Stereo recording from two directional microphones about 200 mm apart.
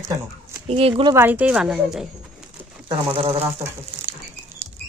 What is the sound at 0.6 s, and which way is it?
Speech, 30° right (ahead or behind).